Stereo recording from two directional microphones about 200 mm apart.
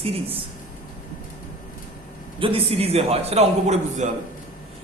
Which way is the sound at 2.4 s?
30° right (ahead or behind).